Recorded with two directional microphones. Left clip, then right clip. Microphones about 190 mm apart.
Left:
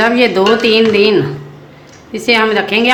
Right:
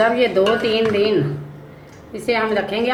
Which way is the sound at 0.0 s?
55° left (ahead or behind).